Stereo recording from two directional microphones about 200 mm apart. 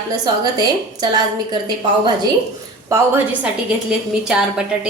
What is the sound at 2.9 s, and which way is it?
A woman's voice, 10° right (ahead or behind).